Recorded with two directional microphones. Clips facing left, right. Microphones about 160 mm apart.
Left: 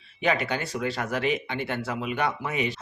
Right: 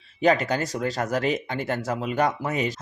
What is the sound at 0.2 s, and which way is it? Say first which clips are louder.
Speech: right 5 dB; 40° right (ahead or behind).